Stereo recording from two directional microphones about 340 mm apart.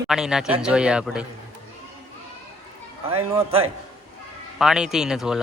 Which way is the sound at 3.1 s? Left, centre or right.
Centre.